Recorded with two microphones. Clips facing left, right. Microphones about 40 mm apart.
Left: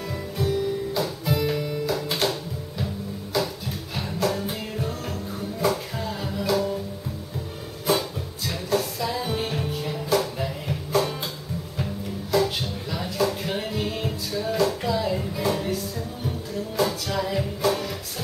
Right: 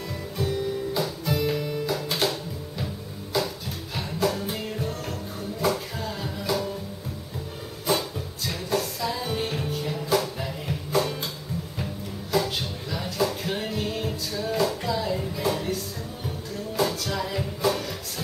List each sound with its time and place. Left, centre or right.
0.4 s music: centre
3.9 s music: centre
8.5 s music: centre